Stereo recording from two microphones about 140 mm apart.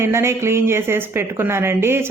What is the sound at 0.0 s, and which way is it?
Speech, 20° right (ahead or behind).